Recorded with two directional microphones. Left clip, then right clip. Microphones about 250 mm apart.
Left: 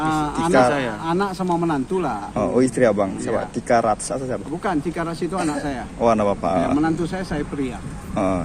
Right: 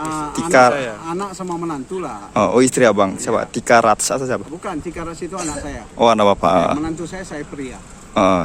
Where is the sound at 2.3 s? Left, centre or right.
Right.